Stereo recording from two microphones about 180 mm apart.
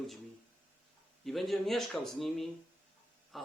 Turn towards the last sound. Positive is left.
turn(degrees=0)  # may be behind; listen again after turning